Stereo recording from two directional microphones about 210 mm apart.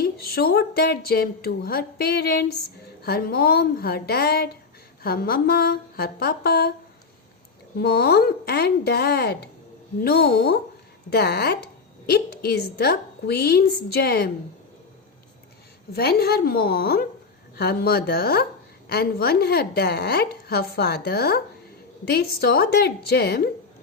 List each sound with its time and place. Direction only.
0.0 s a woman's voice: 45° left (ahead or behind)
7.8 s a woman's voice: 50° left (ahead or behind)
15.9 s a woman's voice: 50° left (ahead or behind)